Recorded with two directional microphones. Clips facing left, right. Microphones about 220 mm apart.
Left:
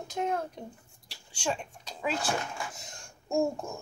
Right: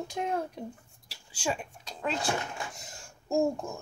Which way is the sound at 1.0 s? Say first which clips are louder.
Even; 5° right (ahead or behind).